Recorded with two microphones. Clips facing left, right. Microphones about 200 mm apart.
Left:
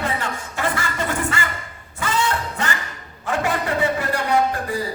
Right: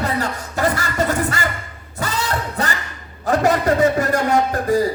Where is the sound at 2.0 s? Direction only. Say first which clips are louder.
Even; 40° right (ahead or behind).